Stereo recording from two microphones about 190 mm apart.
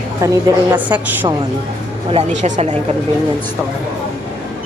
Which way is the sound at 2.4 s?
40° right (ahead or behind).